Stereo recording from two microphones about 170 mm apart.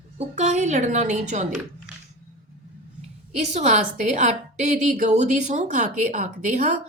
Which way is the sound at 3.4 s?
45° right (ahead or behind).